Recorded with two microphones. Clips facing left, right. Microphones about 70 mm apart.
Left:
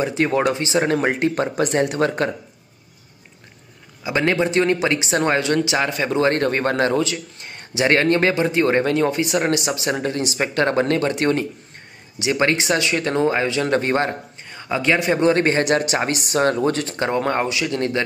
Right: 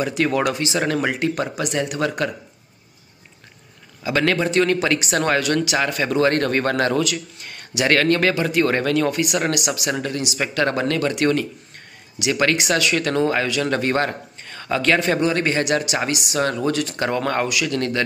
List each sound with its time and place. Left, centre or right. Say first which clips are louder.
0.0 s speech: left 1 dB; left
4.0 s speech: even; left
15.1 s speech: left 3 dB; left
17.0 s speech: left 2 dB; left